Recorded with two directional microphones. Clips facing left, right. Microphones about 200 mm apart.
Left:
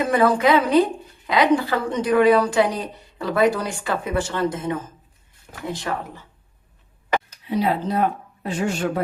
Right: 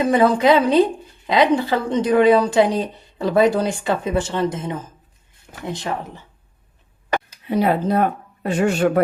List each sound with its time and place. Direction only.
0.1 s a woman's voice: 25° right (ahead or behind)
7.4 s speech: 55° right (ahead or behind)